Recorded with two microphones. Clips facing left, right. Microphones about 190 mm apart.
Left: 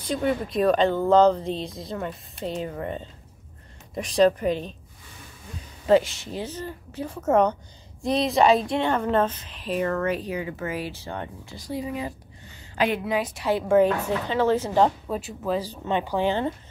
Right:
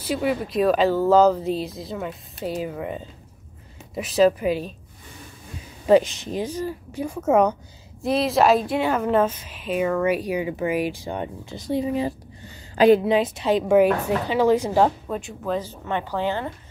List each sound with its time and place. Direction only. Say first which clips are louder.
0.0 s speech: right 1 dB; 5° right (ahead or behind)
5.9 s speech: right 3 dB; 15° right (ahead or behind); by 13.1 s 35° right (ahead or behind)
13.1 s speech: right 5 dB; 25° right (ahead or behind)
15.0 s speech: even; 5° left (ahead or behind)